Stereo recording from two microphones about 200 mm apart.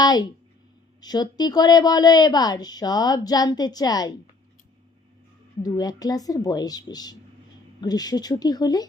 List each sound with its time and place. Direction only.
0.0 s a woman's voice: 20° left (ahead or behind)
5.6 s a woman's voice: 20° left (ahead or behind)